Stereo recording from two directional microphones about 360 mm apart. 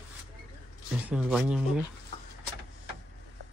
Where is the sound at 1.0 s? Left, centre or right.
Centre.